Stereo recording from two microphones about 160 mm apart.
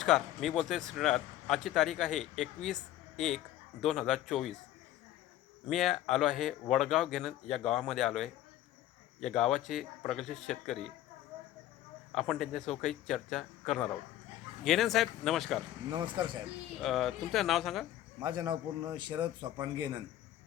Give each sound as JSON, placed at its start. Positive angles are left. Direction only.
{"t": 0.0, "sound": "speech", "side_deg": 0}
{"t": 5.6, "sound": "speech", "side_deg": 0}
{"t": 12.1, "sound": "speech", "side_deg": 0}
{"t": 15.9, "sound": "speech", "side_deg": -30}
{"t": 16.8, "sound": "speech", "side_deg": 0}
{"t": 18.2, "sound": "speech", "side_deg": -25}